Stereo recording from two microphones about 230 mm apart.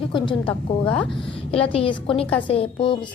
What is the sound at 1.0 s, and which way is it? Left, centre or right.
Speech, left.